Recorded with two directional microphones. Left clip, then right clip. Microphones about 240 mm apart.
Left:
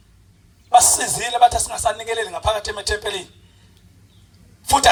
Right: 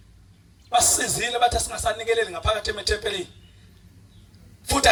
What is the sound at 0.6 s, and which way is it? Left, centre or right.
Speech, centre.